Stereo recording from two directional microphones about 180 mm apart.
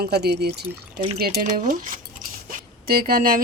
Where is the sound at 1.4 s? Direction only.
50° right (ahead or behind).